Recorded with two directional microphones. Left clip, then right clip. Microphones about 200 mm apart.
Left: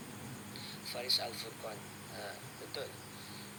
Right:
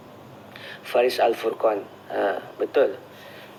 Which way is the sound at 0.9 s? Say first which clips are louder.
Right 17 dB; 20° left (ahead or behind).